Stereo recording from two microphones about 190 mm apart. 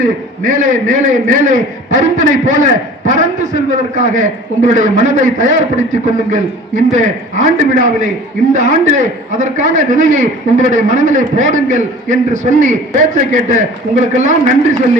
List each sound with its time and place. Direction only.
0.0 s a man's voice: 45° right (ahead or behind)